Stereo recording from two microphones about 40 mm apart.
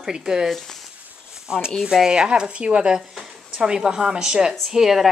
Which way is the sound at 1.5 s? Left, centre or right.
Right.